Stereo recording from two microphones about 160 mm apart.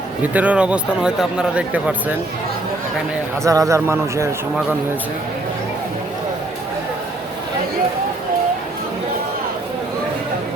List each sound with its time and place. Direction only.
0.2 s a man's voice: 10° right (ahead or behind)
3.4 s a man's voice: 20° right (ahead or behind)